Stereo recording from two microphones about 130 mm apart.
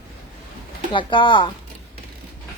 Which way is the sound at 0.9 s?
40° left (ahead or behind).